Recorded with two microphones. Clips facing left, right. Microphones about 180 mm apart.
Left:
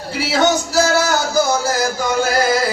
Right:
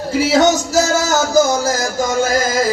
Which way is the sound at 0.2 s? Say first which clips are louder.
Right 3 dB; 45° right (ahead or behind).